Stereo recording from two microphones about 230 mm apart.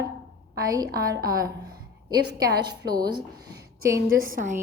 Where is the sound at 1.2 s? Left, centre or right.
Right.